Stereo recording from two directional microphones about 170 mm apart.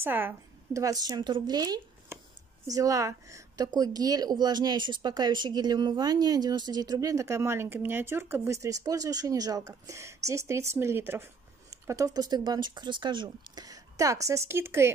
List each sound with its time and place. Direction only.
0.0 s speech: 10° right (ahead or behind)